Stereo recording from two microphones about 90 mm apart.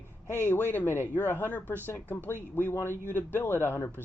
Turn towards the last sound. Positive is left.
turn(degrees=25)  # may be behind; listen again after turning